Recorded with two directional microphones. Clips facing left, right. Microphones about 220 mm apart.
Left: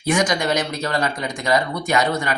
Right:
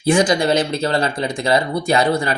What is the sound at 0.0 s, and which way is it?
Speech, 30° right (ahead or behind).